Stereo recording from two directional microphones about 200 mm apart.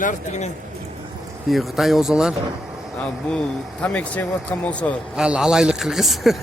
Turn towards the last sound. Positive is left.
turn(degrees=0)  # may be behind; listen again after turning